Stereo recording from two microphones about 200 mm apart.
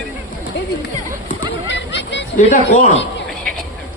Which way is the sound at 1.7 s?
60° left (ahead or behind).